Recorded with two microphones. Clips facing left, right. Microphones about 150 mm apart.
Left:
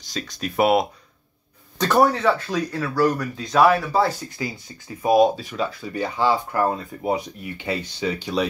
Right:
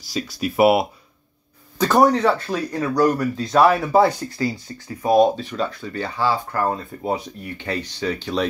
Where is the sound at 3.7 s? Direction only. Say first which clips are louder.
Right 5 dB; 20° right (ahead or behind).